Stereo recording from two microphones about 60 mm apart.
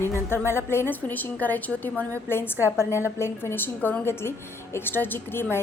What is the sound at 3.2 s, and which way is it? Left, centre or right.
A woman's voice, left.